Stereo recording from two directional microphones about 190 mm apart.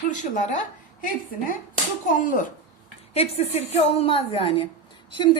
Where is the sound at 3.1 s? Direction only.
35° left (ahead or behind).